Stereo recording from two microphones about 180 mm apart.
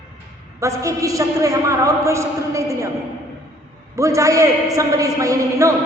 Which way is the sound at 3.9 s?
15° right (ahead or behind).